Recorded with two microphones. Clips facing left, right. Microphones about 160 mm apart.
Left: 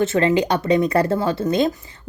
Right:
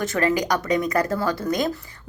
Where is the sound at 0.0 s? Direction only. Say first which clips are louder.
Left 5 dB; 25° left (ahead or behind).